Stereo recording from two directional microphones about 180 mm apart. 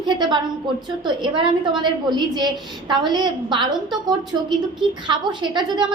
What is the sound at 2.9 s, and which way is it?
Child singing, 25° right (ahead or behind).